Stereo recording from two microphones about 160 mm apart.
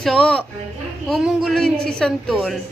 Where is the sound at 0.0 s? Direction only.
5° left (ahead or behind).